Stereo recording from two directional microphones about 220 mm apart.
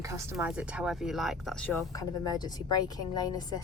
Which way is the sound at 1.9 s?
15° left (ahead or behind).